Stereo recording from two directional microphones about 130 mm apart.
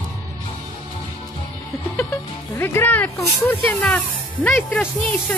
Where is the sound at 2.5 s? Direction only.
20° left (ahead or behind).